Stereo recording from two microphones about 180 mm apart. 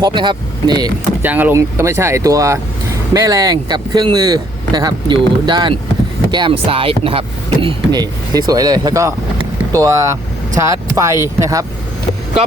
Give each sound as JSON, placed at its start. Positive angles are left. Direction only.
{"t": 0.0, "sound": "speech", "side_deg": -25}
{"t": 1.2, "sound": "speech", "side_deg": -10}